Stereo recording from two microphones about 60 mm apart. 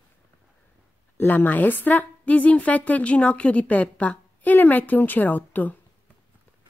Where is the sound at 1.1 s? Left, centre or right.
Left.